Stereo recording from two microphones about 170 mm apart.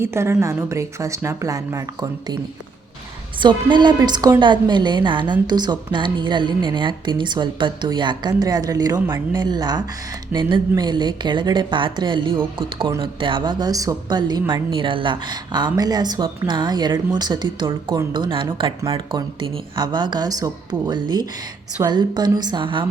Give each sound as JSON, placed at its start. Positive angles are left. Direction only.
{"t": 0.0, "sound": "a woman's voice", "side_deg": -15}
{"t": 3.4, "sound": "a woman's voice", "side_deg": -25}